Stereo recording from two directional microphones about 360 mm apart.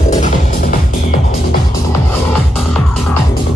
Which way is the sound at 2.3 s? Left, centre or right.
Centre.